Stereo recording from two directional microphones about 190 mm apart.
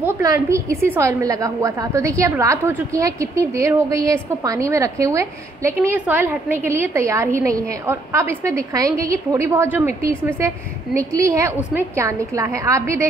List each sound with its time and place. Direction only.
0.0 s a woman's voice: 15° right (ahead or behind)